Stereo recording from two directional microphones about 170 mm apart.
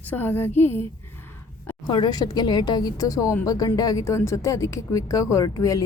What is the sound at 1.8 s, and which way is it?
Speech, 25° left (ahead or behind).